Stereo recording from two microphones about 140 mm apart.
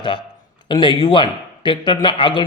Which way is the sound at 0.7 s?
30° left (ahead or behind).